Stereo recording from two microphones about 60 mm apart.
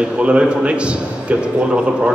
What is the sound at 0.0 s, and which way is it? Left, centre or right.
A man's voice, centre.